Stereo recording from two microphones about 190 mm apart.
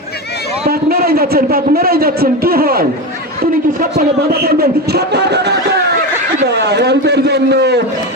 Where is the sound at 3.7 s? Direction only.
50° right (ahead or behind).